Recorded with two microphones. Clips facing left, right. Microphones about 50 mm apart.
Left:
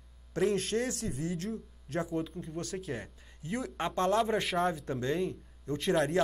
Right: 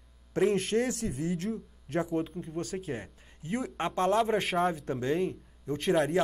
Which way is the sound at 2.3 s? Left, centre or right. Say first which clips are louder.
Right 3 dB; centre.